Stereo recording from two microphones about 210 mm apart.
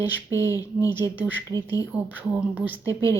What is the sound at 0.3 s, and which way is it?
Speech, 60° right (ahead or behind).